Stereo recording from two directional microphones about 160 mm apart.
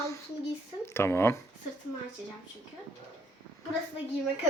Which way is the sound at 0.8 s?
15° left (ahead or behind).